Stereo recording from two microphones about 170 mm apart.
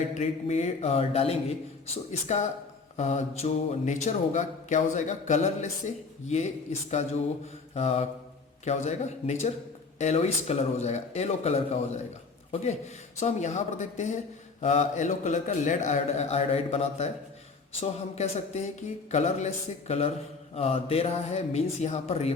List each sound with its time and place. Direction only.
0.1 s speech: 40° left (ahead or behind)
2.2 s mantra: 45° left (ahead or behind)
7.0 s speech: 40° left (ahead or behind)
13.1 s mantra: 45° left (ahead or behind)
17.7 s speech: 40° left (ahead or behind)